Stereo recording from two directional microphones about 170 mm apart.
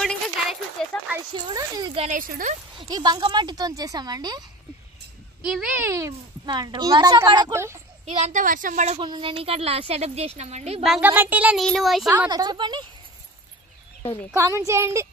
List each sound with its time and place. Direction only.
0.0 s a sound: 5° left (ahead or behind)
1.5 s speech: 25° right (ahead or behind)
2.0 s a woman's voice: 55° right (ahead or behind)
2.8 s speech: 25° right (ahead or behind)
5.4 s speech: 5° right (ahead or behind)
5.9 s speech: 20° right (ahead or behind)
8.0 s a woman's voice: 40° right (ahead or behind)
9.0 s speech: 30° right (ahead or behind)
10.8 s speech: 5° right (ahead or behind)
12.3 s speech: 25° right (ahead or behind)
14.3 s speech: 15° right (ahead or behind)